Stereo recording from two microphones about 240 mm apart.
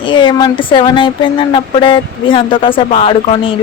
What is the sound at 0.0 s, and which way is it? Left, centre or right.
Speech, centre.